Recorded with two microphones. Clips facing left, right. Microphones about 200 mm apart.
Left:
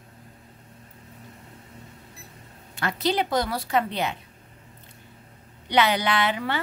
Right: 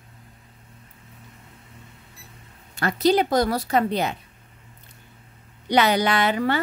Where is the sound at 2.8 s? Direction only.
40° right (ahead or behind).